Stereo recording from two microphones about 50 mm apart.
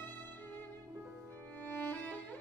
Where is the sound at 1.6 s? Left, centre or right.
Left.